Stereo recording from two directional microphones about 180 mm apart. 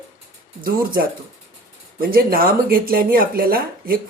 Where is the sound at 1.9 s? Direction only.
55° right (ahead or behind).